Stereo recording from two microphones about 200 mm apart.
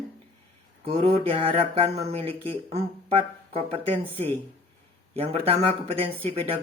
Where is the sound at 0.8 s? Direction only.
30° right (ahead or behind).